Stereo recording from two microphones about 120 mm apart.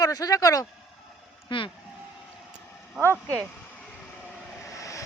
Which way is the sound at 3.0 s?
25° right (ahead or behind).